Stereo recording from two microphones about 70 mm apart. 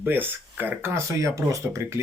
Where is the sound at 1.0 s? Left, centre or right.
Right.